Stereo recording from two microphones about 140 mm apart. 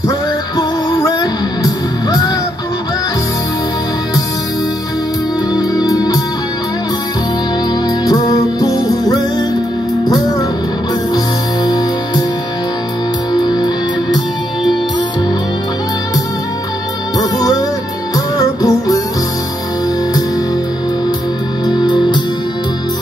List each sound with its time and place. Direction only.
0.6 s music: 25° left (ahead or behind)
5.5 s music: 25° left (ahead or behind)
8.0 s music: 25° left (ahead or behind)
11.6 s music: 30° left (ahead or behind)
13.3 s music: 30° left (ahead or behind)
17.2 s music: 25° left (ahead or behind)
21.6 s music: 30° left (ahead or behind)